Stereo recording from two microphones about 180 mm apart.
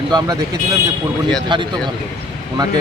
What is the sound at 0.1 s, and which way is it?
Speech, 20° right (ahead or behind).